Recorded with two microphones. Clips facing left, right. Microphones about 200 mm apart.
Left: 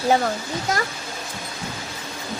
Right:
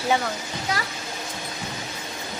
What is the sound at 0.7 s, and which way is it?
Speech, 45° left (ahead or behind).